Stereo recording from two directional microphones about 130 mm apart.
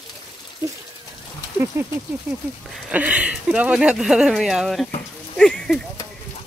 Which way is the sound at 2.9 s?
10° right (ahead or behind).